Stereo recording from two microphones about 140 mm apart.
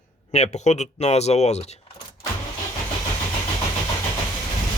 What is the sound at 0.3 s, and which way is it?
Speech, 50° left (ahead or behind).